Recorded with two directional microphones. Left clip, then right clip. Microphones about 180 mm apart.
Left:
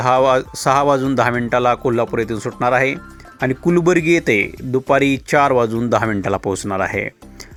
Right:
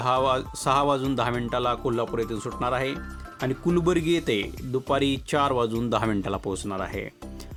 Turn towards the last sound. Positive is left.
turn(degrees=35)  # may be behind; listen again after turning